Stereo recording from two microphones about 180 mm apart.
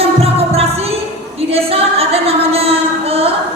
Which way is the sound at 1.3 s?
35° right (ahead or behind).